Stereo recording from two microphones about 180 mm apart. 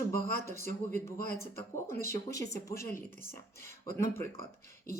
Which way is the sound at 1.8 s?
15° left (ahead or behind).